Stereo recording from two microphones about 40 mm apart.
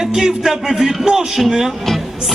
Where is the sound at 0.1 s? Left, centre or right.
Centre.